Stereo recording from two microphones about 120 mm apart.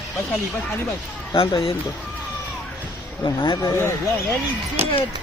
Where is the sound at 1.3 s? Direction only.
50° left (ahead or behind).